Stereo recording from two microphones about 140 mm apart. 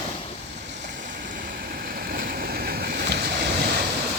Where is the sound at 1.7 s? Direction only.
90° right.